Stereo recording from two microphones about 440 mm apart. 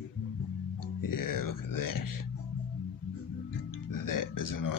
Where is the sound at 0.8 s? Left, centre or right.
Left.